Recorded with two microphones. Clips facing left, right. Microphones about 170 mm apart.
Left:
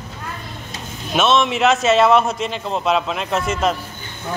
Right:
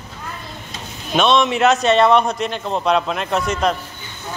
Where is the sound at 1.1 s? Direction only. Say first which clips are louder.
Right 1 dB; 5° left (ahead or behind).